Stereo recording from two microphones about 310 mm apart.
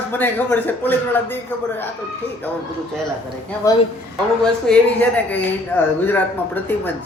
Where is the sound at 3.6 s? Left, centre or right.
Centre.